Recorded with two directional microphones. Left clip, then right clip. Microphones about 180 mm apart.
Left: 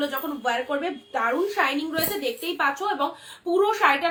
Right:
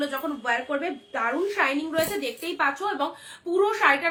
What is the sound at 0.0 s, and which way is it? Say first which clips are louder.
A woman's voice: left 2 dB; 10° right (ahead or behind).